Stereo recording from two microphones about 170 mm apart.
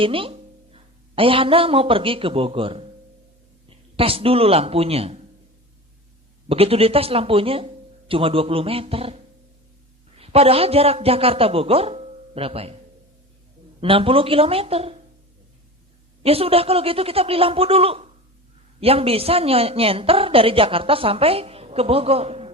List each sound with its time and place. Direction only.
0.0 s speech: 30° right (ahead or behind)
3.9 s a woman's voice: 35° right (ahead or behind)
6.5 s a woman's voice: 35° right (ahead or behind)
13.8 s a woman's voice: 30° right (ahead or behind)
16.2 s a woman's voice: 35° right (ahead or behind)